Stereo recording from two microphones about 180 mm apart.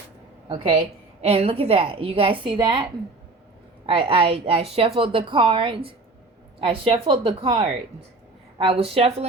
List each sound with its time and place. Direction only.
0.4 s a woman's voice: 25° right (ahead or behind)
3.8 s a woman's voice: 30° right (ahead or behind)